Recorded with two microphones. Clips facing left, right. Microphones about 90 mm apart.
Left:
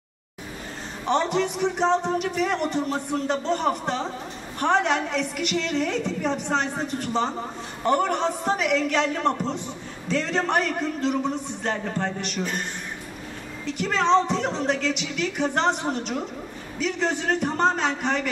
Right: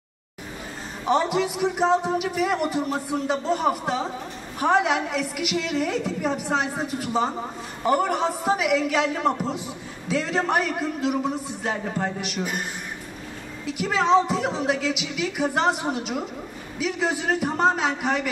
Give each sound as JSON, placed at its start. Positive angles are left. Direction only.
{"t": 1.0, "sound": "a woman's voice", "side_deg": -5}
{"t": 13.7, "sound": "a woman's voice", "side_deg": -5}